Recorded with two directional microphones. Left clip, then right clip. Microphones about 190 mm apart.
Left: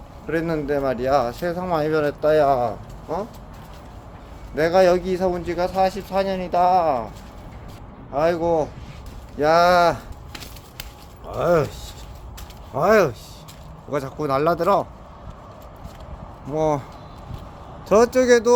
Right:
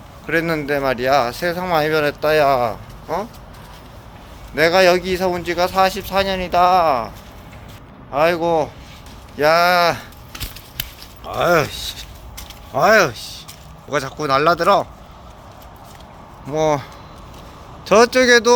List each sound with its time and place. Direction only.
0.3 s speech: centre (ahead or behind)
4.5 s speech: 5° right (ahead or behind)
8.1 s speech: 5° right (ahead or behind)
11.3 s a man's voice: centre (ahead or behind)
16.5 s a man's voice: 10° left (ahead or behind)
17.8 s speech: centre (ahead or behind)